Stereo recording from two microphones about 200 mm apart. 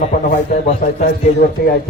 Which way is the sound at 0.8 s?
45° left (ahead or behind).